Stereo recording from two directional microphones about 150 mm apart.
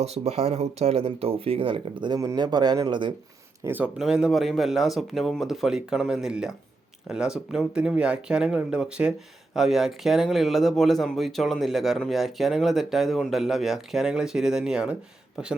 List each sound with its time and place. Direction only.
0.0 s speech: 45° right (ahead or behind); by 3.1 s 25° right (ahead or behind)
3.6 s speech: 15° right (ahead or behind)
3.9 s speech: 5° right (ahead or behind)